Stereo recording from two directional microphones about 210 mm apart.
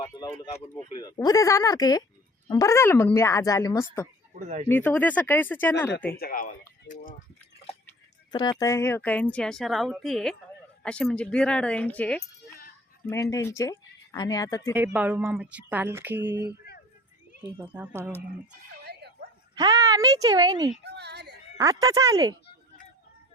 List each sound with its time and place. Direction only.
0.1 s speech: 20° left (ahead or behind)
4.4 s speech: 35° right (ahead or behind)
4.7 s speech: 10° left (ahead or behind)
6.1 s speech: 45° left (ahead or behind)
7.9 s speech: 20° left (ahead or behind)
14.7 s speech: 10° right (ahead or behind)
18.9 s a sound: 50° right (ahead or behind)
19.5 s speech: 15° right (ahead or behind)
20.8 s a sound: 50° right (ahead or behind)
21.6 s speech: 15° right (ahead or behind)